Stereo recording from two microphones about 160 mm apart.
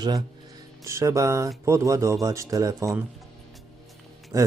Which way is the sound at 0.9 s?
20° right (ahead or behind).